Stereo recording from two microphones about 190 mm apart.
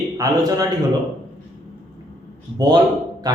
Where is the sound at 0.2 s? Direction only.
20° right (ahead or behind).